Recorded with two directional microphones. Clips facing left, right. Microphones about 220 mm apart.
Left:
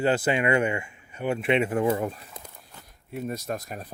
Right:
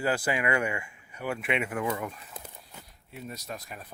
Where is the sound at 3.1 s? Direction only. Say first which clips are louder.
Left 9 dB; 50° left (ahead or behind).